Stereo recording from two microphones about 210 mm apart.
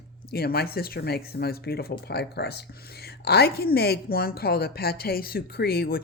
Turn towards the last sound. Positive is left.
turn(degrees=45)  # may be behind; listen again after turning